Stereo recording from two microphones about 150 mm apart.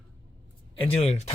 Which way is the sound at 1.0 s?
45° left (ahead or behind).